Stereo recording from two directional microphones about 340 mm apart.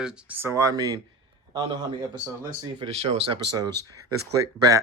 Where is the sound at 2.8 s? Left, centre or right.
Centre.